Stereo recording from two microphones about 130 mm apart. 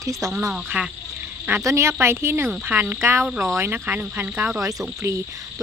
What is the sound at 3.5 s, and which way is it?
Speech, 15° right (ahead or behind).